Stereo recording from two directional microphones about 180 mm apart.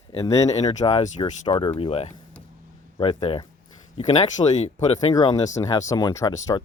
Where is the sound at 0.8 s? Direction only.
35° left (ahead or behind).